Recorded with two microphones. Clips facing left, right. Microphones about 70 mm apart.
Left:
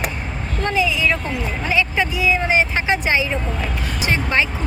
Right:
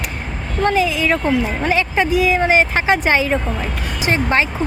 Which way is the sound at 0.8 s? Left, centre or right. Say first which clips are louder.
Right 2 dB; right.